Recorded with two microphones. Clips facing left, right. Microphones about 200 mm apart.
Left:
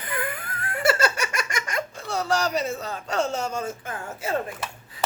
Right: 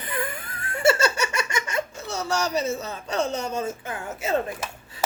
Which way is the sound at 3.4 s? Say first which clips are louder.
Right 1 dB; 20° right (ahead or behind).